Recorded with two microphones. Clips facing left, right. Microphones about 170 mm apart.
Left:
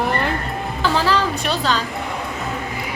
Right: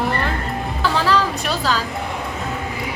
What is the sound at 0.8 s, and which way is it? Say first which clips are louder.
Music: even; centre (ahead or behind).